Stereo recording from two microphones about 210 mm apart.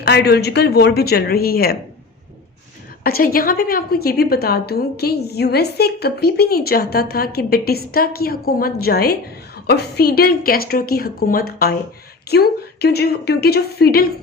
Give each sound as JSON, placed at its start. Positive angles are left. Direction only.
{"t": 0.0, "sound": "a woman's voice", "side_deg": 50}
{"t": 3.0, "sound": "a woman's voice", "side_deg": 45}